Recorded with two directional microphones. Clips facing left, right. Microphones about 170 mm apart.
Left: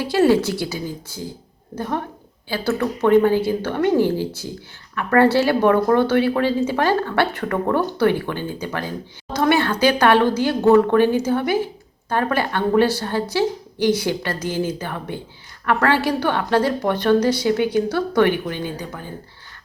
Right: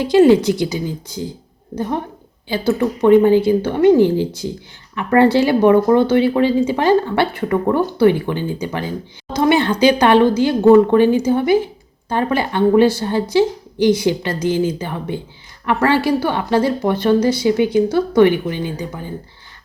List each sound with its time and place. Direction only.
0.1 s speech: 15° right (ahead or behind)